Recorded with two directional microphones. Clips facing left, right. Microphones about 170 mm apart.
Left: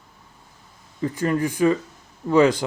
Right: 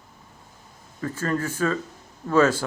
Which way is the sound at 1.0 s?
15° left (ahead or behind).